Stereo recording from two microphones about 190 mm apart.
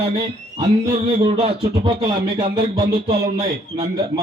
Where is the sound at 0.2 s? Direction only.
30° right (ahead or behind).